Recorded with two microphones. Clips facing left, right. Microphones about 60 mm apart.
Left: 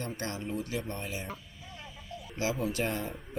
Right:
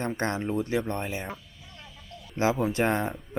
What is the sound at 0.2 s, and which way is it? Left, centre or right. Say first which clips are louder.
Speech: right 7 dB; right.